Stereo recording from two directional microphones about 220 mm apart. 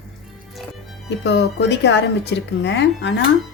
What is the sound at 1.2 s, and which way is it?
Speech, 50° left (ahead or behind).